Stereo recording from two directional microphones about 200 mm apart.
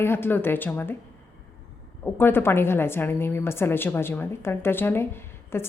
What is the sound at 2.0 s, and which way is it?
A woman's voice, 10° left (ahead or behind).